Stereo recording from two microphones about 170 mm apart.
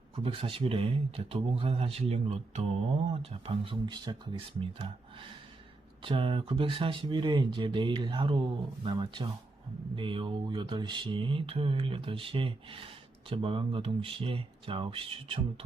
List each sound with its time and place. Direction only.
0.2 s speech: 30° right (ahead or behind)
6.0 s speech: 30° right (ahead or behind)